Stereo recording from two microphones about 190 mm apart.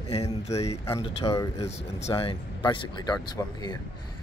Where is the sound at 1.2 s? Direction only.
20° left (ahead or behind).